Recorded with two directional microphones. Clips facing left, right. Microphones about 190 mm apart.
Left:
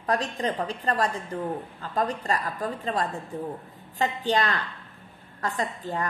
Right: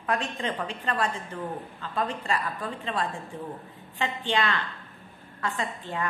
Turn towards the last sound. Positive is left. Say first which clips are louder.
# left 2 dB
turn(degrees=40)  # may be behind; listen again after turning